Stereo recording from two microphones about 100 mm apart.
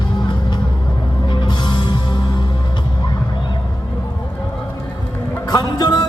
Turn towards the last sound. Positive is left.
turn(degrees=45)  # may be behind; listen again after turning